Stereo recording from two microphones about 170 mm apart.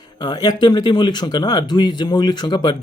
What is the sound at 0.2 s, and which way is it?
Speech, 25° left (ahead or behind).